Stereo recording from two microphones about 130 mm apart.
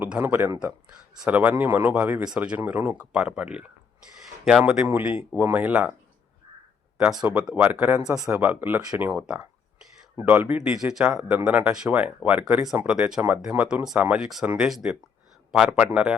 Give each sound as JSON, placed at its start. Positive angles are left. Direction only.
{"t": 0.0, "sound": "speech", "side_deg": -15}
{"t": 7.0, "sound": "speech", "side_deg": -5}